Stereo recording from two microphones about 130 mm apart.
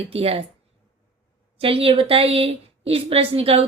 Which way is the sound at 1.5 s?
45° right (ahead or behind).